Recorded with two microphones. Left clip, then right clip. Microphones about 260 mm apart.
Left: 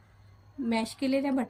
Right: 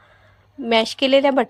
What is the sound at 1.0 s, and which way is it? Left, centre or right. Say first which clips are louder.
Speech: right 14 dB; right.